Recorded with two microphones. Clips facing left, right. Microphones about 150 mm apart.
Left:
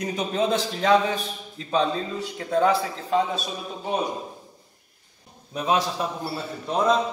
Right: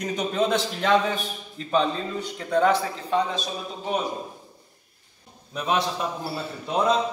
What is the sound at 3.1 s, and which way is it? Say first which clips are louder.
Speech: left 1 dB; centre (ahead or behind).